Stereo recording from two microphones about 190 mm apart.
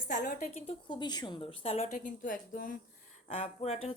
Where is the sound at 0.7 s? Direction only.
25° left (ahead or behind); by 2.7 s 45° left (ahead or behind).